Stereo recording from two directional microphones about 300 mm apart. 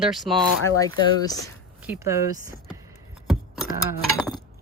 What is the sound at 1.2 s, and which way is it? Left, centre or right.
Speech, centre.